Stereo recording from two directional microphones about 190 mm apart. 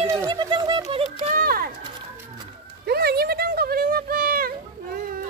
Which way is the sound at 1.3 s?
50° right (ahead or behind).